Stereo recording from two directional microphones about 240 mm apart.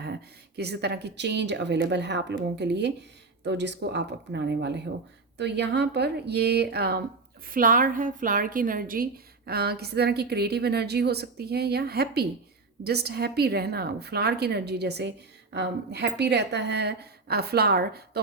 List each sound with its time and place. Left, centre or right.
0.0 s a woman's voice: right